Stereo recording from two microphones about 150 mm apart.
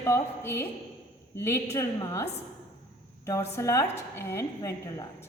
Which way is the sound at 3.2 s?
20° left (ahead or behind).